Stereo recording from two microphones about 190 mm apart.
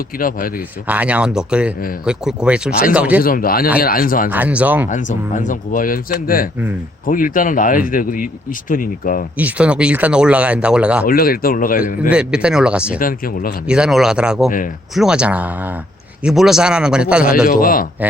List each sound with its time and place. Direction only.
0.2 s speech: 50° left (ahead or behind)
0.9 s a man's voice: 5° right (ahead or behind)
3.2 s speech: 50° left (ahead or behind)
4.3 s speech: 10° right (ahead or behind)
4.9 s speech: 40° left (ahead or behind)
9.4 s speech: 5° right (ahead or behind)
11.0 s speech: 50° left (ahead or behind)
12.0 s a man's voice: 5° right (ahead or behind)
13.0 s speech: 50° left (ahead or behind)
13.7 s a man's voice: 5° right (ahead or behind)
17.4 s speech: 50° left (ahead or behind)